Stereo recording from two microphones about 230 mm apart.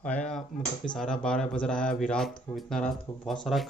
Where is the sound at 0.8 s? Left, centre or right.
Centre.